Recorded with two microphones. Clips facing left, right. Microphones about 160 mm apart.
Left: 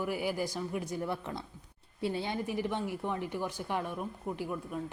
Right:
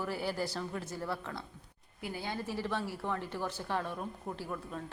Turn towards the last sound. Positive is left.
turn(degrees=10)  # may be behind; listen again after turning